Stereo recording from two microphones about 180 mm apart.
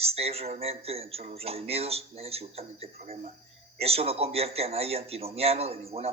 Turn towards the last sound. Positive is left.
turn(degrees=-35)  # may be behind; listen again after turning